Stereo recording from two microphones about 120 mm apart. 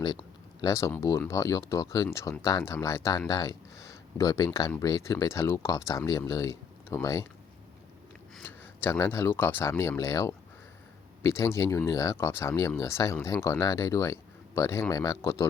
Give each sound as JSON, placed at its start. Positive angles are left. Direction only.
{"t": 0.0, "sound": "speech", "side_deg": 35}
{"t": 8.4, "sound": "speech", "side_deg": 20}